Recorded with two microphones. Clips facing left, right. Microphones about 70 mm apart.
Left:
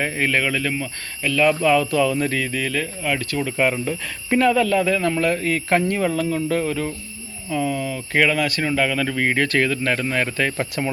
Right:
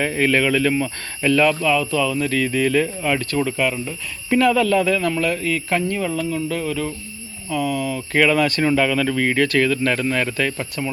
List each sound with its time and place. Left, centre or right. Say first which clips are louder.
0.0 s speech: right 3 dB; centre
1.6 s speech: left 2 dB; left
2.4 s speech: right 6 dB; centre
3.6 s speech: left 2 dB; left
4.3 s speech: right 1 dB; centre
5.2 s speech: left 1 dB; left
7.5 s speech: right 1 dB; centre
7.9 s speech: right 3 dB; centre
10.6 s speech: left 2 dB; left